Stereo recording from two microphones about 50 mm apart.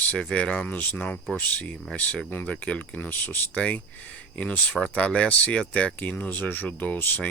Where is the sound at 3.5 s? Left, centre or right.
Left.